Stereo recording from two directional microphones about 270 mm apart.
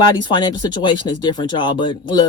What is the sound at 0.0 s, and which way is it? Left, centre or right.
Speech, centre.